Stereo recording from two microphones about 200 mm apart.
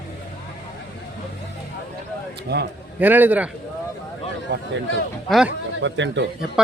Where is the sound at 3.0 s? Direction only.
10° right (ahead or behind).